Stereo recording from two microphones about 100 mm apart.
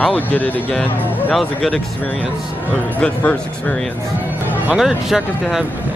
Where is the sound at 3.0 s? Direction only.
15° left (ahead or behind).